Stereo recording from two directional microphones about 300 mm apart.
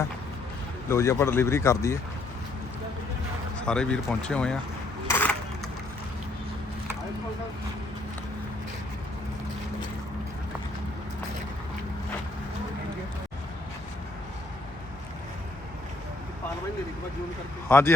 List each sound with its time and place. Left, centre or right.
0.9 s speech: centre
3.6 s speech: centre
5.0 s a sound: centre
17.7 s a man's voice: centre